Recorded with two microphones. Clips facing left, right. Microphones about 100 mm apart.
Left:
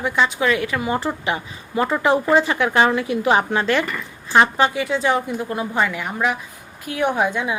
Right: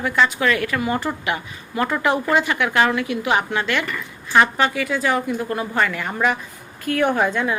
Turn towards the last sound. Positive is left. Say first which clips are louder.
# right 1 dB
turn(degrees=15)  # may be behind; listen again after turning